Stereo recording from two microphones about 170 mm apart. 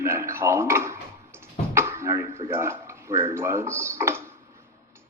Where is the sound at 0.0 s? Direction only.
15° right (ahead or behind).